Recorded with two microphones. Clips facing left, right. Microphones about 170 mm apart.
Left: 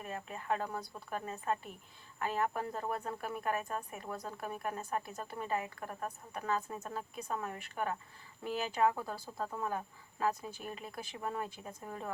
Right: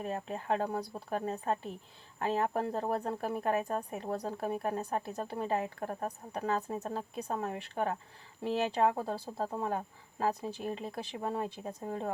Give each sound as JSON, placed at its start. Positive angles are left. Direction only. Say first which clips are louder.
{"t": 0.0, "sound": "speech", "louder": "right 6 dB", "side_deg": -35}